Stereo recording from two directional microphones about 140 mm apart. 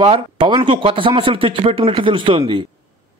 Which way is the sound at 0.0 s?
40° right (ahead or behind).